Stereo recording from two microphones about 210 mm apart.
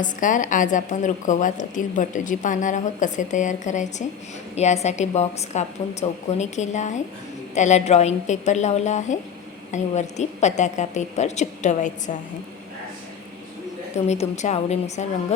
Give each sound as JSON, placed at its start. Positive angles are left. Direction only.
{"t": 0.0, "sound": "a woman's voice", "side_deg": 40}
{"t": 13.9, "sound": "a woman's voice", "side_deg": 30}